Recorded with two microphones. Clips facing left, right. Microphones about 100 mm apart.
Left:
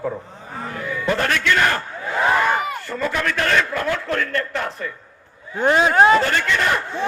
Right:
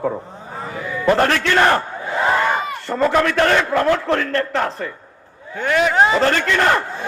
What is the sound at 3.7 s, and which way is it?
Battle cry, 75° right (ahead or behind).